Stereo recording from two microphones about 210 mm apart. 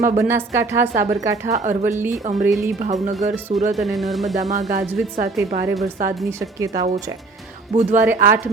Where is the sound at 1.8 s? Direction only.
10° right (ahead or behind).